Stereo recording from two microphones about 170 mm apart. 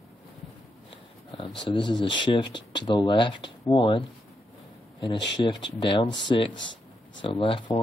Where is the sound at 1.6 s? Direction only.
30° left (ahead or behind).